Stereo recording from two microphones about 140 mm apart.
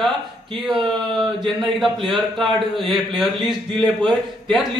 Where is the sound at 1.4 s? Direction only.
Centre (ahead or behind).